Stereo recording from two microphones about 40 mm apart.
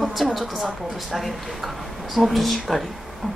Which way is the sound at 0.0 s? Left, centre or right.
Centre.